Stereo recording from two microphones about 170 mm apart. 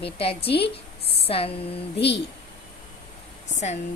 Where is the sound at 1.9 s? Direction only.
80° left.